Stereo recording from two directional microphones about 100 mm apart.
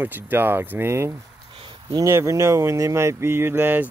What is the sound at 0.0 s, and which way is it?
Speech, 20° right (ahead or behind).